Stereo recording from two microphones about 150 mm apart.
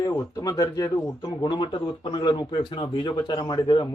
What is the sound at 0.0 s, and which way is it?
Speech, 20° left (ahead or behind).